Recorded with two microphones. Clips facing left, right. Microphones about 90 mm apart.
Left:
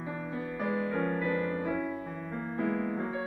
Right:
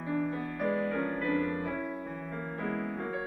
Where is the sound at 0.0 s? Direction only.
10° left (ahead or behind).